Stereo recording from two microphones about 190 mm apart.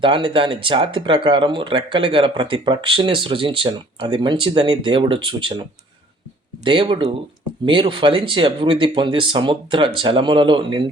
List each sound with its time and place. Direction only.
0.0 s speech: 25° right (ahead or behind)
6.7 s speech: 25° right (ahead or behind)